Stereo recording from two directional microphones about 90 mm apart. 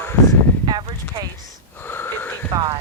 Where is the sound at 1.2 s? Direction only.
60° right (ahead or behind).